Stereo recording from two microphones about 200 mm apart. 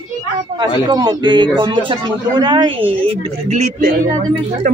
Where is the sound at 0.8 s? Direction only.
20° right (ahead or behind).